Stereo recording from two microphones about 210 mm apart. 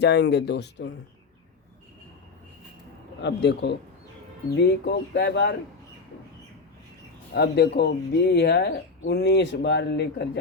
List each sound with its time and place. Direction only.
0.0 s speech: 55° left (ahead or behind)
3.2 s a man's voice: 55° left (ahead or behind)
4.9 s speech: 55° left (ahead or behind)
7.3 s speech: 50° left (ahead or behind)